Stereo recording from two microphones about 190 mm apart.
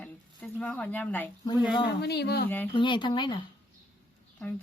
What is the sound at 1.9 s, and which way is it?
Speech, 60° left (ahead or behind).